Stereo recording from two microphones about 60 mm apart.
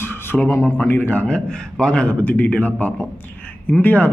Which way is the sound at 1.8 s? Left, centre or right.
Centre.